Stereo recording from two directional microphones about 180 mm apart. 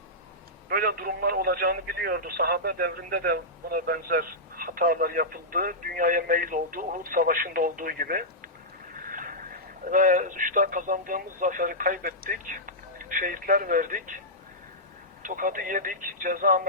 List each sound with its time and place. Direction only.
0.7 s speech: 55° right (ahead or behind)
9.0 s a sound: 50° right (ahead or behind)
9.9 s speech: 50° right (ahead or behind)
15.2 s speech: 50° right (ahead or behind)